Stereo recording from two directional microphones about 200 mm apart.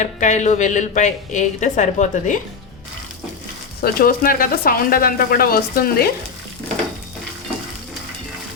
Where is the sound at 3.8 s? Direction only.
45° left (ahead or behind).